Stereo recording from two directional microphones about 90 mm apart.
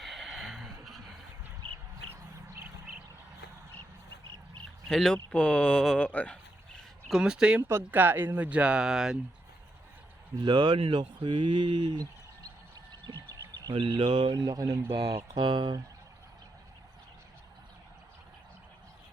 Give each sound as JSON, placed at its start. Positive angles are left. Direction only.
{"t": 0.0, "sound": "a sound", "side_deg": 0}
{"t": 1.6, "sound": "a sound", "side_deg": -90}
{"t": 4.9, "sound": "speech", "side_deg": 5}
{"t": 7.1, "sound": "speech", "side_deg": -10}
{"t": 7.7, "sound": "speech", "side_deg": -25}
{"t": 10.4, "sound": "speech", "side_deg": -60}
{"t": 13.1, "sound": "a sound", "side_deg": -45}
{"t": 13.7, "sound": "speech", "side_deg": -60}
{"t": 15.4, "sound": "speech", "side_deg": -65}